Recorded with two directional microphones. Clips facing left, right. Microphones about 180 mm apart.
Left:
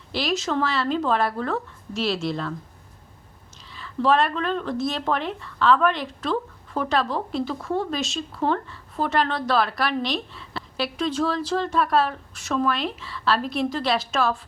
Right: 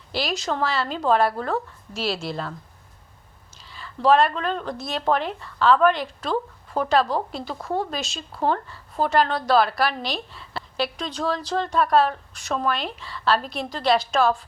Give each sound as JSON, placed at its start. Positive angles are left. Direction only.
{"t": 0.1, "sound": "speech", "side_deg": 0}
{"t": 3.7, "sound": "speech", "side_deg": 0}